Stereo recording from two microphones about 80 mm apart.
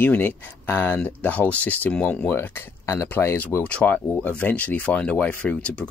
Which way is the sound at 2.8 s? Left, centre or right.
Left.